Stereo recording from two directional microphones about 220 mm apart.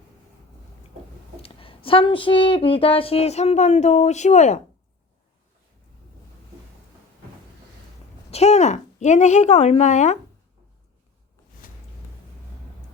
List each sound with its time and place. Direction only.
1.4 s speech: 25° left (ahead or behind)
8.3 s a woman's voice: 30° left (ahead or behind)
11.6 s music: 40° left (ahead or behind)